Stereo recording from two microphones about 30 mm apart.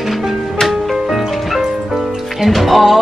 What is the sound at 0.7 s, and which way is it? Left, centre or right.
Music, centre.